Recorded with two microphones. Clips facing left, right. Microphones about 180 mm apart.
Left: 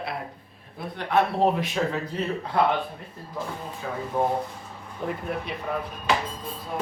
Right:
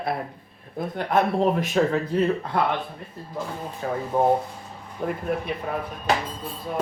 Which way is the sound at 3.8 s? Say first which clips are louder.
Right 6 dB; 45° right (ahead or behind).